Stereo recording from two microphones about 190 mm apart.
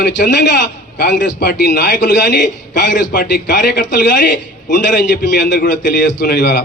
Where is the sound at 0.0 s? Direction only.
65° left (ahead or behind).